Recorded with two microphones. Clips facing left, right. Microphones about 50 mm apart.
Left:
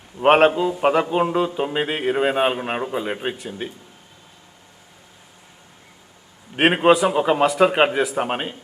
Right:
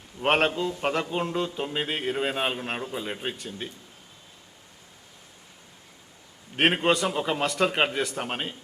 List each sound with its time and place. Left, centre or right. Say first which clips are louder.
0.2 s a man's voice: left 9 dB; centre
3.3 s a man's voice: left 6 dB; centre
6.6 s a man's voice: left 7 dB; centre